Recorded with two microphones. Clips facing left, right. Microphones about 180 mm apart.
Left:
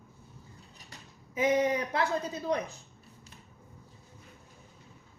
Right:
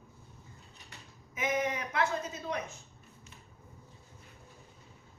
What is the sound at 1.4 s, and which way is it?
Speech, 30° left (ahead or behind).